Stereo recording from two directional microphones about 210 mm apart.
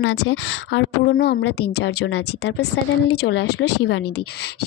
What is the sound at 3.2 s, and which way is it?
Speech, 90° left.